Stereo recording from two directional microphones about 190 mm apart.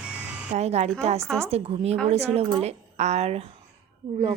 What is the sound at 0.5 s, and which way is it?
Speech, 35° right (ahead or behind).